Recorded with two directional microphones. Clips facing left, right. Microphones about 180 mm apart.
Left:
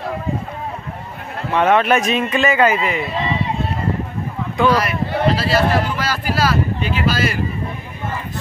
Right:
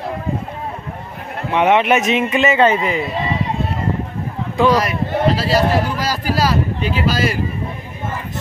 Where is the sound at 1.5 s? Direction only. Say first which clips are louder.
Right 1 dB; 20° right (ahead or behind).